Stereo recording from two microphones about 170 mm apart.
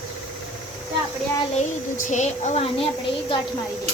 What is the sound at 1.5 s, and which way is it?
A child's voice, 45° left (ahead or behind).